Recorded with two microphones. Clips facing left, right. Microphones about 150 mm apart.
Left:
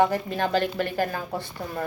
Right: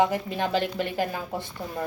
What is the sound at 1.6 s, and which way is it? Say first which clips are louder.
Speech: left 1 dB; 5° right (ahead or behind).